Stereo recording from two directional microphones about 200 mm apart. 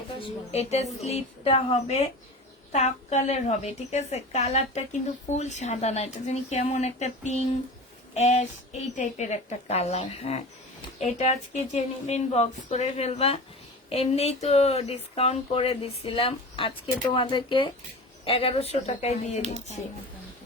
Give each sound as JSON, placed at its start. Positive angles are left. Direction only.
{"t": 0.2, "sound": "a woman's voice", "side_deg": 35}